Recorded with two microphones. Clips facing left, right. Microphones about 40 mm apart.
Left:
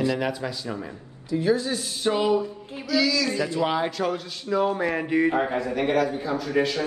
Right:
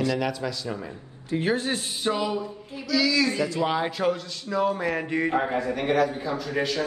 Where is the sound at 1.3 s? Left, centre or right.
Right.